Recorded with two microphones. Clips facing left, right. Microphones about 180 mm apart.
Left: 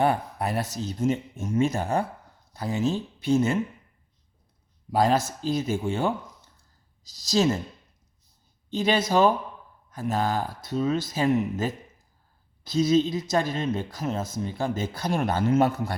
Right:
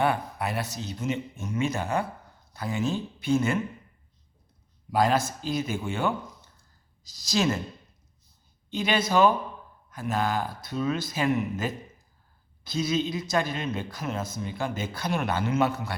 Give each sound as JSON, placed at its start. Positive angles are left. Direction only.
{"t": 0.0, "sound": "speech", "side_deg": 40}
{"t": 4.9, "sound": "speech", "side_deg": 35}
{"t": 7.3, "sound": "speech", "side_deg": 25}
{"t": 8.7, "sound": "speech", "side_deg": 40}
{"t": 12.7, "sound": "speech", "side_deg": 40}